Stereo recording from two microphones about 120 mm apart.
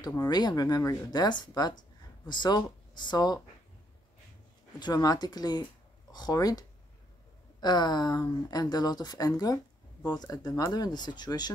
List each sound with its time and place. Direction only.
0.3 s speech: 35° left (ahead or behind)
4.7 s speech: 35° left (ahead or behind)
7.6 s speech: 35° left (ahead or behind)